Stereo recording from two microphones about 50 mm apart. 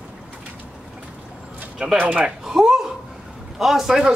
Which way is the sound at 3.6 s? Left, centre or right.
Centre.